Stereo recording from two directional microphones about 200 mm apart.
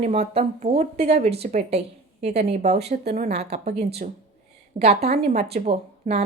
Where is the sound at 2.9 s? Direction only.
45° right (ahead or behind).